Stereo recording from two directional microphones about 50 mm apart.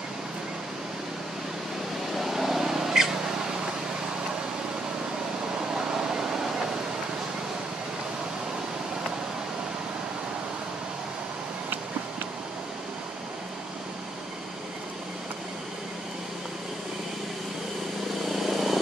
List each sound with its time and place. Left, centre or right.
2.1 s vehicle: centre
5.8 s air conditioning: centre
18.3 s vehicle: centre